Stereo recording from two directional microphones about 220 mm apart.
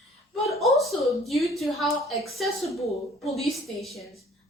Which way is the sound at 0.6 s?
Centre (ahead or behind).